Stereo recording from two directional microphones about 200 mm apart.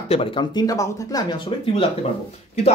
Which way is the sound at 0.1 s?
25° left (ahead or behind).